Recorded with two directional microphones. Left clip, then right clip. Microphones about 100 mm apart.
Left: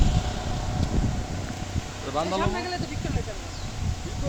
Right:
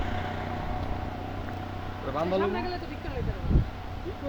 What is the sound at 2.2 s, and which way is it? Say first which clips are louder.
Speech: left 1 dB; 25° left (ahead or behind).